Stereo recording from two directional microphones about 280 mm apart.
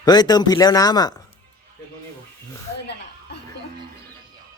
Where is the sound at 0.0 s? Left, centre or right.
Centre.